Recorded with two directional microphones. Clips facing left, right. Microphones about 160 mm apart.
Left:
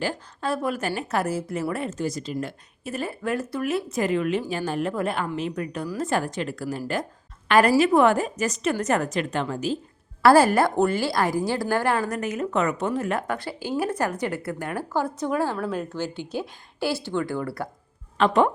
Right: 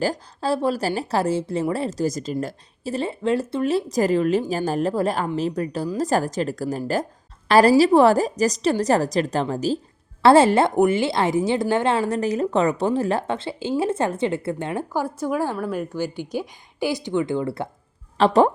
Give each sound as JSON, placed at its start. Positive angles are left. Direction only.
{"t": 0.0, "sound": "speech", "side_deg": -35}
{"t": 10.2, "sound": "a woman's voice", "side_deg": -25}
{"t": 14.9, "sound": "a woman's voice", "side_deg": -10}